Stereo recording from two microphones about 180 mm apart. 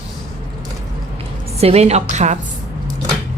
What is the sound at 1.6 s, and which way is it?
Speech, 35° right (ahead or behind).